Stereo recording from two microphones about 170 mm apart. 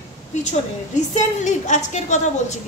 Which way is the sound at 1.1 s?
45° left (ahead or behind).